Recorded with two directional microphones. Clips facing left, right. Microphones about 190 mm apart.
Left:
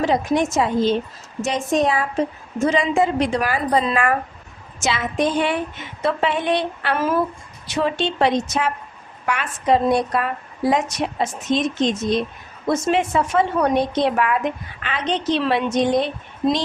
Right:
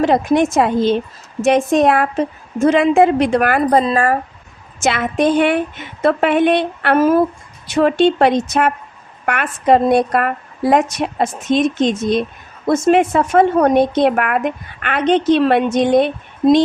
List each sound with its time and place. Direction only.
0.0 s speech: 60° right (ahead or behind)
3.8 s speech: 35° right (ahead or behind)
4.8 s speech: 55° right (ahead or behind)